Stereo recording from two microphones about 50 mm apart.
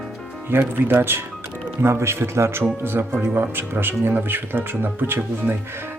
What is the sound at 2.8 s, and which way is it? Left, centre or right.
Speech, right.